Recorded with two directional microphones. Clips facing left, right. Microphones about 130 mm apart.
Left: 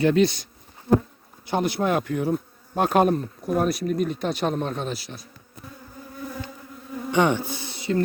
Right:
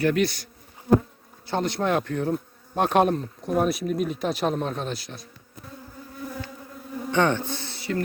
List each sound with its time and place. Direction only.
0.0 s speech: 20° left (ahead or behind)
1.5 s speech: 10° left (ahead or behind)
7.1 s speech: 15° left (ahead or behind)